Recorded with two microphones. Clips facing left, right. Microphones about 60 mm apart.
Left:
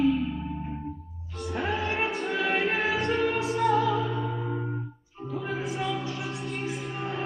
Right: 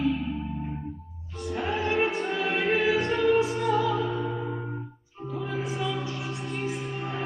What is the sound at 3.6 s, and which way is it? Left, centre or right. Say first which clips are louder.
Music: left 2 dB; left.